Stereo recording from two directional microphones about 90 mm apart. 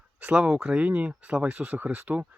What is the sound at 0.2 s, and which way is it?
Speech, 10° right (ahead or behind).